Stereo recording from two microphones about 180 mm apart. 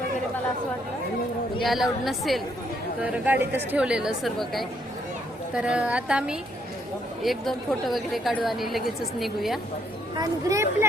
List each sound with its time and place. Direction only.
1.6 s a woman's voice: centre (ahead or behind)
10.2 s speech: 15° right (ahead or behind)